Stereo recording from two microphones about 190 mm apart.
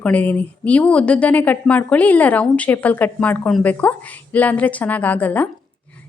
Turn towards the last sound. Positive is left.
turn(degrees=10)  # may be behind; listen again after turning